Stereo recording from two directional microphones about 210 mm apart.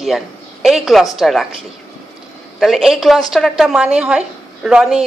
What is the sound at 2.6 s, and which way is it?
A woman's voice, centre (ahead or behind).